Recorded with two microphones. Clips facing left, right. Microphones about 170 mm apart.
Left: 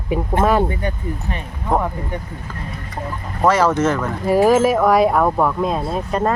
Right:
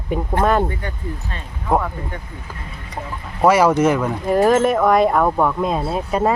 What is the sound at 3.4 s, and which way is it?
Speech, 10° right (ahead or behind).